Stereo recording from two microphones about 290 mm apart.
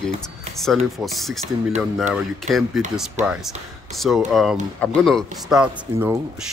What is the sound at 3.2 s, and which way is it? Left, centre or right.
Speech, right.